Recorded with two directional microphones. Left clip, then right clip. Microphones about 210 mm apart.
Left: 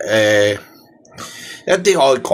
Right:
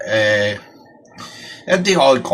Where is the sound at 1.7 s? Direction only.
55° left (ahead or behind).